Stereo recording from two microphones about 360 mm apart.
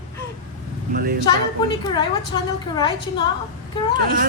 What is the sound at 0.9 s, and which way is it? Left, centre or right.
Speech, right.